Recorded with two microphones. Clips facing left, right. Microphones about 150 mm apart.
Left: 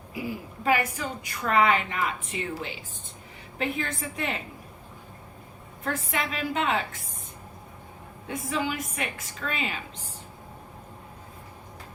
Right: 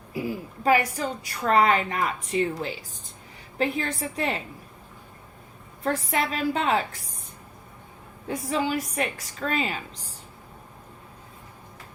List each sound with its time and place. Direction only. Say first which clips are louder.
0.6 s a woman's voice: right 3 dB; 35° right (ahead or behind)
5.8 s a woman's voice: right 4 dB; 35° right (ahead or behind)
8.3 s a woman's voice: right 3 dB; 35° right (ahead or behind)